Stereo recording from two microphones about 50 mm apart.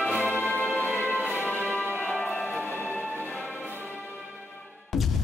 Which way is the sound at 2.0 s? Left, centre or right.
Centre.